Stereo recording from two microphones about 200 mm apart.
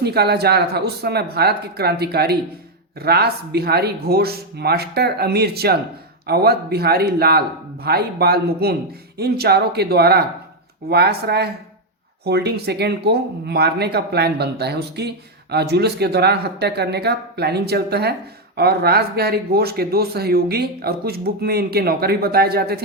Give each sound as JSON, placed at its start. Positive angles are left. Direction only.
{"t": 0.0, "sound": "speech", "side_deg": -55}